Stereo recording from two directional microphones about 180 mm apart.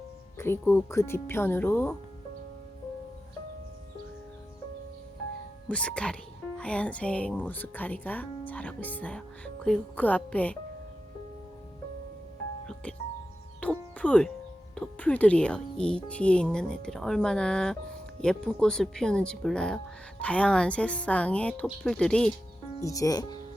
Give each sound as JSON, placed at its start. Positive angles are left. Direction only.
{"t": 0.3, "sound": "speech", "side_deg": 15}
{"t": 5.6, "sound": "speech", "side_deg": 5}
{"t": 13.6, "sound": "music", "side_deg": 5}
{"t": 14.8, "sound": "speech", "side_deg": 10}
{"t": 22.8, "sound": "speech", "side_deg": 20}